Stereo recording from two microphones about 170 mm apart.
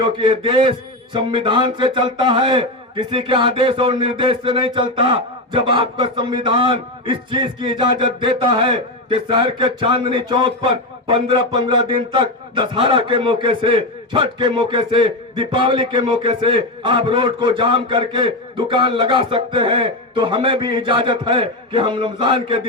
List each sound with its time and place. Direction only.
0.0 s a man's voice: 30° right (ahead or behind)